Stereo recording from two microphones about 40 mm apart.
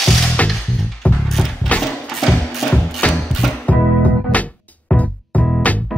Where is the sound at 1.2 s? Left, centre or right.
Centre.